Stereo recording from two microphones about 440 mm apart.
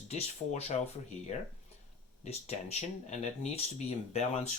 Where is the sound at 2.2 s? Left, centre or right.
Centre.